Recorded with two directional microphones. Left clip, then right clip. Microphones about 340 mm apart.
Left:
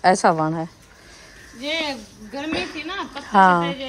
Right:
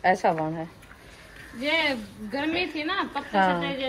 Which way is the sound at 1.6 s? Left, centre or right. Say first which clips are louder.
Right 1 dB; centre.